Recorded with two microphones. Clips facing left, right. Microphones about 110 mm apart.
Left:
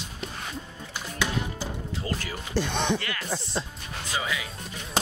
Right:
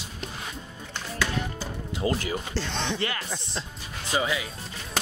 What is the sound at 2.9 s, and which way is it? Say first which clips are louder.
Speech: right 2 dB; 30° right (ahead or behind).